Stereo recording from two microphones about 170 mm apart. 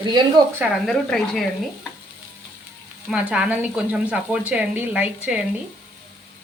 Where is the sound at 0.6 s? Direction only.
Centre (ahead or behind).